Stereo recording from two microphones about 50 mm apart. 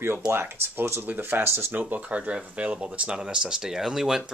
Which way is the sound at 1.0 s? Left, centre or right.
Right.